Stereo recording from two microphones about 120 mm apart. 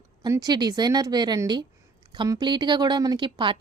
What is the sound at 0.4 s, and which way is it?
A woman's voice, 35° right (ahead or behind).